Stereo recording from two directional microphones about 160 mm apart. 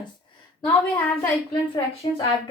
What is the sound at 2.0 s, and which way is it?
Speech, 35° left (ahead or behind).